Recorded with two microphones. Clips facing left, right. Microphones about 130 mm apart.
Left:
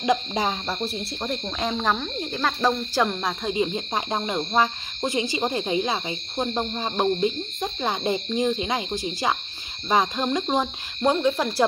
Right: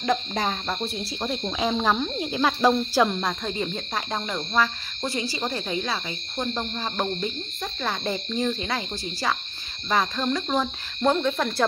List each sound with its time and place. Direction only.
0.0 s speech: 10° left (ahead or behind)
0.8 s speech: centre (ahead or behind)